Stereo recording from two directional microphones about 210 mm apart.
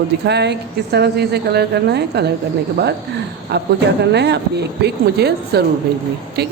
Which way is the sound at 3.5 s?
50° right (ahead or behind).